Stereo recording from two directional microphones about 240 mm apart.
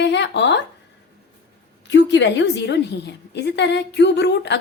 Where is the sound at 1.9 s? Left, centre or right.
Left.